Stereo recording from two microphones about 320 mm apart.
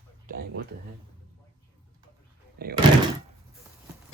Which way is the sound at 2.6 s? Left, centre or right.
Right.